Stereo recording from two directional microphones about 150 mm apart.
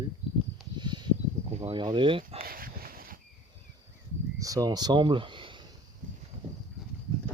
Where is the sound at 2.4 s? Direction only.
75° right (ahead or behind).